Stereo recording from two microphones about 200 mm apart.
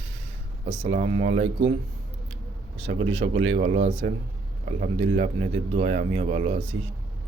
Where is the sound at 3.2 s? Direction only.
30° right (ahead or behind).